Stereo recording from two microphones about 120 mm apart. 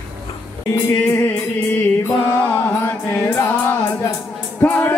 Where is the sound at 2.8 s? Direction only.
15° left (ahead or behind).